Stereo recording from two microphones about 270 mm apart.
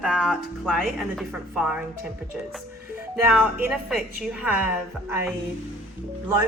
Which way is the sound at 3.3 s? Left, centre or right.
Centre.